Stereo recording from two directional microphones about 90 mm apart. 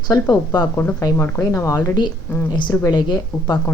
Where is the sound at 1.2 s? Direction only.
35° left (ahead or behind).